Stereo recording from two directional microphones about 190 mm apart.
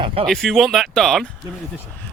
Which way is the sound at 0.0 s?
30° right (ahead or behind).